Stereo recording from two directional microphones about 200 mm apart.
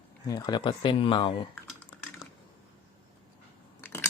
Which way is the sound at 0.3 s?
20° left (ahead or behind).